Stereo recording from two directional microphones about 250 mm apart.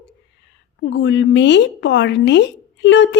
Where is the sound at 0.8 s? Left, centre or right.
Left.